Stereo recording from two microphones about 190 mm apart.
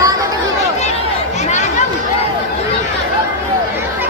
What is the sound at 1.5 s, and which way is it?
Chatter, 40° left (ahead or behind).